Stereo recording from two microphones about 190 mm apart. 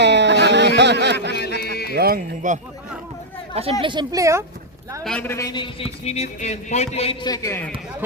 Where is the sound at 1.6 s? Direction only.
55° left (ahead or behind).